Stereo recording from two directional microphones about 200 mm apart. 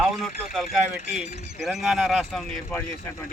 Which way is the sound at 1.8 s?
Centre (ahead or behind).